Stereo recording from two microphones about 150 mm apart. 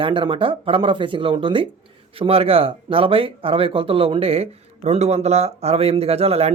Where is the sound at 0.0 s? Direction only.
35° right (ahead or behind).